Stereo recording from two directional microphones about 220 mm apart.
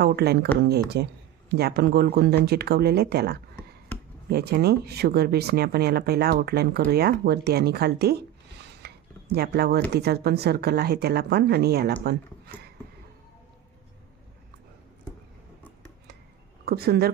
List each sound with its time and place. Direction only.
0.0 s speech: 45° right (ahead or behind)
16.6 s speech: 45° right (ahead or behind)